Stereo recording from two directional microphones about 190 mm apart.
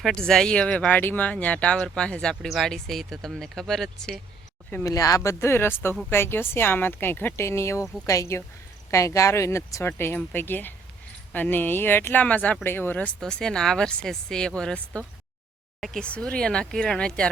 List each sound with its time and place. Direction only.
0.0 s speech: centre (ahead or behind)
4.7 s speech: 15° left (ahead or behind)